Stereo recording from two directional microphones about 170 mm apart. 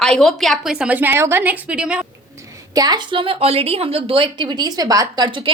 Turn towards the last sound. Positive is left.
turn(degrees=-25)  # may be behind; listen again after turning